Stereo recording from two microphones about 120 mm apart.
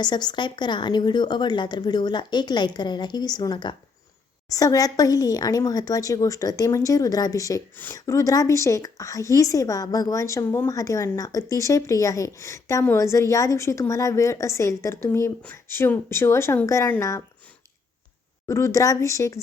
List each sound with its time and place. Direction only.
0.0 s a woman's voice: 35° left (ahead or behind)
18.4 s a woman's voice: 25° left (ahead or behind)